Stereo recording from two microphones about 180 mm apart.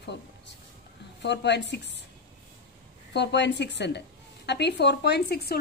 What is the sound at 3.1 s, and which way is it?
A woman's voice, 70° left (ahead or behind).